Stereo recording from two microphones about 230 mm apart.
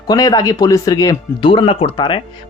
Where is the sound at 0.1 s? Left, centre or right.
Centre.